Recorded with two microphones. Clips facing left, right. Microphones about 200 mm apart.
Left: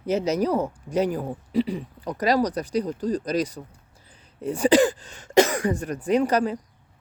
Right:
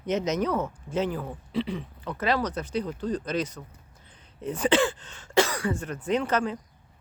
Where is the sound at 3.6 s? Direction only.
25° left (ahead or behind).